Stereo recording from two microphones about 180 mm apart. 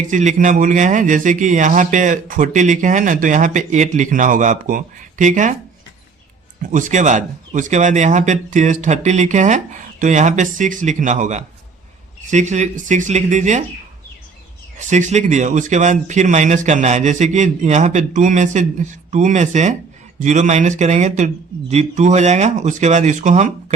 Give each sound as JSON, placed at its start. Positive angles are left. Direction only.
{"t": 0.1, "sound": "speech", "side_deg": -45}
{"t": 6.6, "sound": "speech", "side_deg": -45}
{"t": 14.8, "sound": "speech", "side_deg": -40}